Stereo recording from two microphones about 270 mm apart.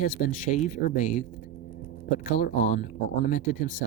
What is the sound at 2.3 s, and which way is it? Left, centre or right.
Speech, left.